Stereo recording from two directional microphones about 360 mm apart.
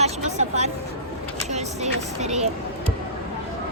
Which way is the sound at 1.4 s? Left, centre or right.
Centre.